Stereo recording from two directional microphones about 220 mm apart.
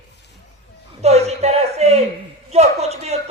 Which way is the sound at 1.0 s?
30° right (ahead or behind).